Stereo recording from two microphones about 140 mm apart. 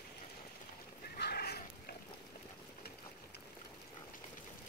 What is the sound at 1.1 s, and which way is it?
Horse, 90° left.